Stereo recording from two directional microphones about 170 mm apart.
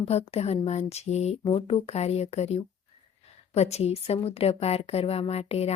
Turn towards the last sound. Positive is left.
turn(degrees=40)  # may be behind; listen again after turning